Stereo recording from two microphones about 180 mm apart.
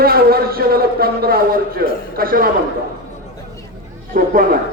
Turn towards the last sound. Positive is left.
turn(degrees=-50)  # may be behind; listen again after turning